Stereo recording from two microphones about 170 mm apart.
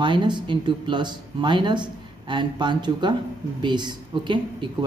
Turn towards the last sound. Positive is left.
turn(degrees=-30)  # may be behind; listen again after turning